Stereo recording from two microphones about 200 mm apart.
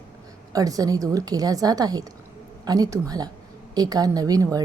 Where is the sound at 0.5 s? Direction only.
15° right (ahead or behind).